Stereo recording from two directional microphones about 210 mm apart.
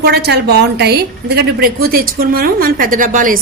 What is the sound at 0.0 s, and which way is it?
A woman's voice, 50° right (ahead or behind).